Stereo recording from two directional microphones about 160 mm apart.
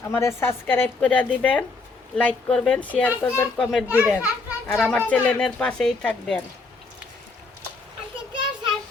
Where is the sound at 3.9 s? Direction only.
10° right (ahead or behind).